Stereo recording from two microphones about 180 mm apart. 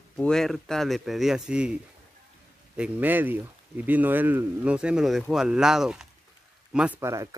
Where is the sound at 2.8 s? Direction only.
10° right (ahead or behind).